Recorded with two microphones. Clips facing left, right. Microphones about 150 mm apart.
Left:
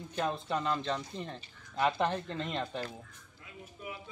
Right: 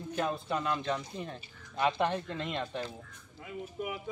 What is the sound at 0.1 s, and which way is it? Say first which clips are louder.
Speech: even; 5° right (ahead or behind).